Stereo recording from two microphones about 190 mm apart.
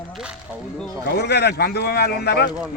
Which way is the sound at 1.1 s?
60° left (ahead or behind).